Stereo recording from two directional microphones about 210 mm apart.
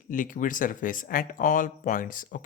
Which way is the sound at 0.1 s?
40° left (ahead or behind).